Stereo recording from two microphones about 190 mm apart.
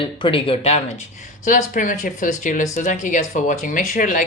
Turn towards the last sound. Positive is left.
turn(degrees=45)  # may be behind; listen again after turning